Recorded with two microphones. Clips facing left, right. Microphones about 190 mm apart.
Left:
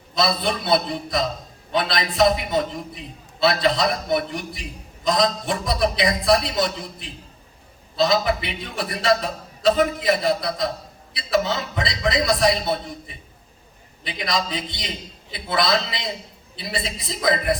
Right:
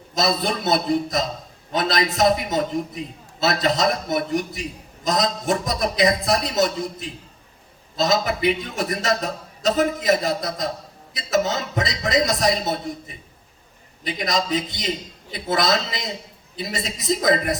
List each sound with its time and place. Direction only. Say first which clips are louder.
0.1 s a man's voice: even; 45° right (ahead or behind)
14.0 s a man's voice: right 2 dB; 45° right (ahead or behind)